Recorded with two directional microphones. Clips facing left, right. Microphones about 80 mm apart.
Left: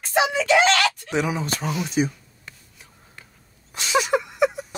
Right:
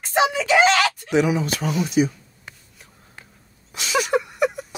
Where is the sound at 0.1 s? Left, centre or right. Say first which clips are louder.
Right 1 dB; centre.